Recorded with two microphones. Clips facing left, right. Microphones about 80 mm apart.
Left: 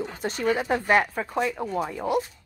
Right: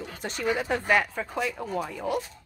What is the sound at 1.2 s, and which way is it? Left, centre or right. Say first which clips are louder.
Speech: left 4 dB; left.